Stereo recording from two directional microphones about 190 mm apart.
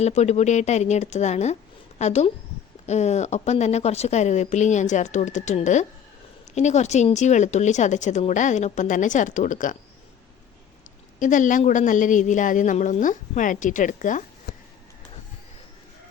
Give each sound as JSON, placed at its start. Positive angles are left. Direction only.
{"t": 0.0, "sound": "a woman's voice", "side_deg": 35}
{"t": 11.2, "sound": "a woman's voice", "side_deg": 40}